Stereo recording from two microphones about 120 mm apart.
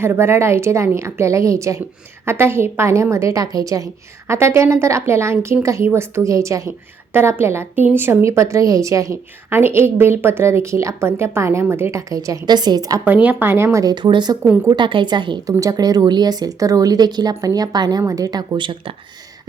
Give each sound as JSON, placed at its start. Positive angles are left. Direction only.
{"t": 0.0, "sound": "a woman's voice", "side_deg": -20}
{"t": 13.2, "sound": "a woman's voice", "side_deg": -20}
{"t": 13.9, "sound": "speech", "side_deg": -40}
{"t": 14.4, "sound": "a woman's voice", "side_deg": -15}
{"t": 14.7, "sound": "speech", "side_deg": -40}
{"t": 15.4, "sound": "speech", "side_deg": -30}